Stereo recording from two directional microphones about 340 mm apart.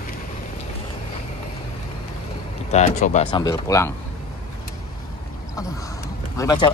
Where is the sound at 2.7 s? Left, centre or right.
Centre.